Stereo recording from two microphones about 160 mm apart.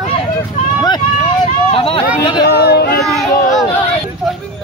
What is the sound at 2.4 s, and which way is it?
Speech, 90° left.